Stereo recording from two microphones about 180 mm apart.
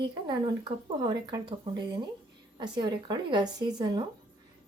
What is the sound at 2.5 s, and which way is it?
Speech, 25° right (ahead or behind).